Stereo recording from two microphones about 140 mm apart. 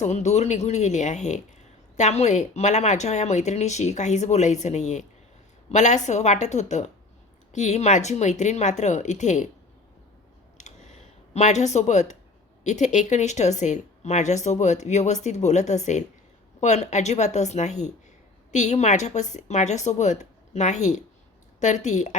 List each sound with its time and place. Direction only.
0.0 s speech: 55° left (ahead or behind)
10.6 s a sound: 55° left (ahead or behind)
12.6 s speech: 55° left (ahead or behind)